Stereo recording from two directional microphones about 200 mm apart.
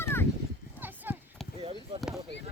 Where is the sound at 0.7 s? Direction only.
10° right (ahead or behind).